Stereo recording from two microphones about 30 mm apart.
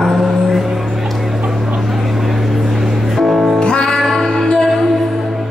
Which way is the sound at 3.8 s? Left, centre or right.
Centre.